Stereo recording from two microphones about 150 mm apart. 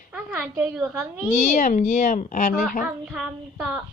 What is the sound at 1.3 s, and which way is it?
Speech, 55° left (ahead or behind).